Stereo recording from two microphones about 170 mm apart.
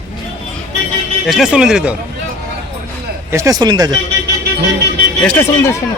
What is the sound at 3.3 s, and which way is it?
Speech, 20° right (ahead or behind).